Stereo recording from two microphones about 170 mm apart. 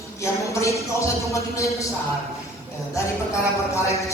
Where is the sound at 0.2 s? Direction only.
15° left (ahead or behind).